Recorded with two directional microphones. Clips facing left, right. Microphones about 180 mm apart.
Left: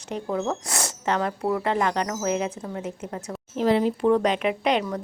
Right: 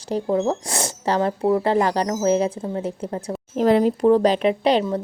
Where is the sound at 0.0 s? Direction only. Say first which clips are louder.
Right 6 dB; 35° right (ahead or behind).